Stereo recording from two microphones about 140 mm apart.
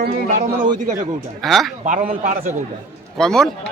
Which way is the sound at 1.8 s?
70° right (ahead or behind).